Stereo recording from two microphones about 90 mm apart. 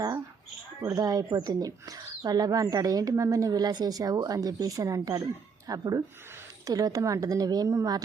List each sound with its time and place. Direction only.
0.9 s speech: 40° right (ahead or behind)